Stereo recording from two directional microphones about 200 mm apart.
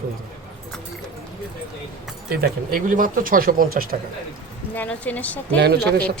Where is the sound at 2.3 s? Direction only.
45° right (ahead or behind).